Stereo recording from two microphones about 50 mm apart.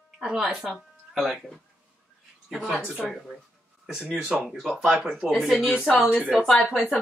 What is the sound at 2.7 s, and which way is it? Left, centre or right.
Speech, centre.